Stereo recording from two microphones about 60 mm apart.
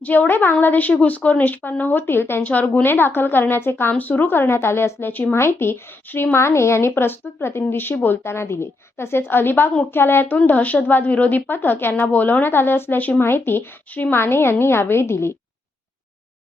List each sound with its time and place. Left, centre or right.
0.0 s a woman's voice: left
2.4 s a woman's voice: left
10.3 s a woman's voice: left
13.2 s a woman's voice: left